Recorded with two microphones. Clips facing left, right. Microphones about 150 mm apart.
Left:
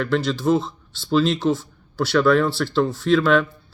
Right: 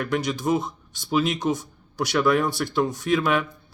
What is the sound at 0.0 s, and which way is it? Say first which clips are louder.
Speech: left 4 dB; 15° right (ahead or behind).